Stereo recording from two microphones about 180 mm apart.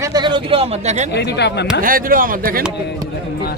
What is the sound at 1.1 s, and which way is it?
Speech, 70° left (ahead or behind).